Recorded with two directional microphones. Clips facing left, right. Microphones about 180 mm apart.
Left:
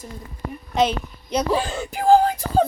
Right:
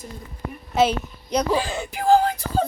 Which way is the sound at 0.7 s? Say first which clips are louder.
Right 1 dB; 5° right (ahead or behind).